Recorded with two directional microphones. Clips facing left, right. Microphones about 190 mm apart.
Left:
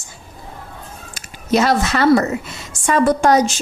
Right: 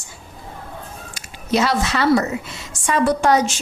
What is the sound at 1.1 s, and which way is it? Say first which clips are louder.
A woman's voice: left 3 dB; 45° left (ahead or behind).